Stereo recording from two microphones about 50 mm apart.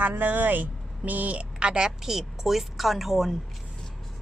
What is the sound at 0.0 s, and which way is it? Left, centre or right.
A woman's voice, right.